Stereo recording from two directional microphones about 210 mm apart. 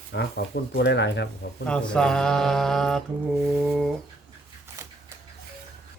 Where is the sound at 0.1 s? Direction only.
50° left (ahead or behind).